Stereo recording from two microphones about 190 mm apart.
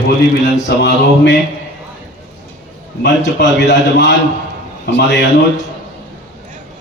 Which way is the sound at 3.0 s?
65° left (ahead or behind).